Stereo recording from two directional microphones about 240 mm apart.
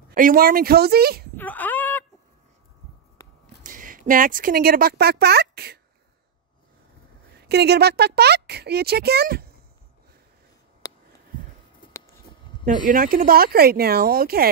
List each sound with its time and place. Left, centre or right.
0.1 s speech: right
1.3 s whimper: centre
3.6 s speech: right
7.3 s speech: right
12.6 s speech: right